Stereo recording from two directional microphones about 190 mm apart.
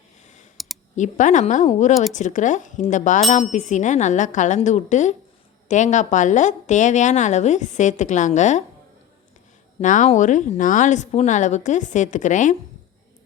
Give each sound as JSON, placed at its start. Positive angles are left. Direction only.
{"t": 0.5, "sound": "a sound", "side_deg": 0}
{"t": 0.9, "sound": "a woman's voice", "side_deg": 40}
{"t": 9.8, "sound": "a woman's voice", "side_deg": 40}